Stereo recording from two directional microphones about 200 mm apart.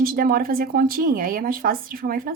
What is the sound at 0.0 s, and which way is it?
Speech, 45° right (ahead or behind).